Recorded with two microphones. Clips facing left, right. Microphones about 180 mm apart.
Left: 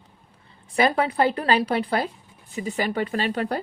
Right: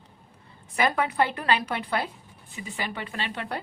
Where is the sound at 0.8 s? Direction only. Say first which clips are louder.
Left 4 dB; 30° left (ahead or behind).